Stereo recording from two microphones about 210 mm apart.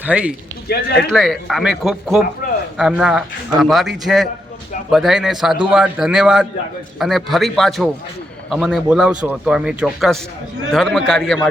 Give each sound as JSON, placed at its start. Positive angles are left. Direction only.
{"t": 0.0, "sound": "a man's voice", "side_deg": -5}
{"t": 0.7, "sound": "speech", "side_deg": 50}
{"t": 1.0, "sound": "speech", "side_deg": 0}